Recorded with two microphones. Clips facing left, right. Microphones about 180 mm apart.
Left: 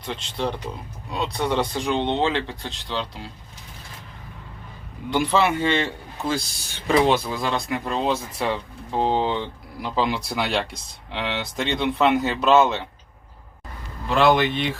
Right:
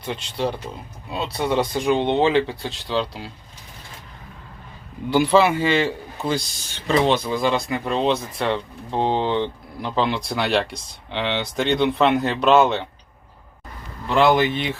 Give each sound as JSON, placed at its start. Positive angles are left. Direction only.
{"t": 0.0, "sound": "speech", "side_deg": -5}
{"t": 5.1, "sound": "speech", "side_deg": -5}
{"t": 6.7, "sound": "speech", "side_deg": 10}
{"t": 14.1, "sound": "speech", "side_deg": 0}